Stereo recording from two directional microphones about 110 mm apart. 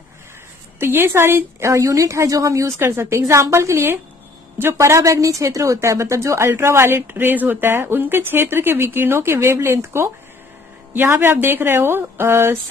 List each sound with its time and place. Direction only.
0.7 s a woman's voice: 20° right (ahead or behind)